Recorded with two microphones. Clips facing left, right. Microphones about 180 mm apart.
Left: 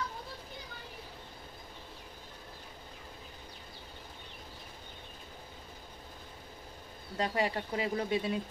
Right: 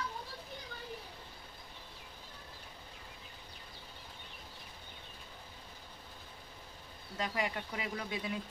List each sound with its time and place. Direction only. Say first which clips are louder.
7.2 s speech: left 5 dB; 30° left (ahead or behind)